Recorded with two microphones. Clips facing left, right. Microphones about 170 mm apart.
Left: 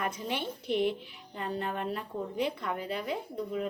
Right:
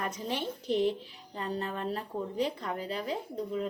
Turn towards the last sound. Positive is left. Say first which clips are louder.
# even
turn(degrees=-35)  # may be behind; listen again after turning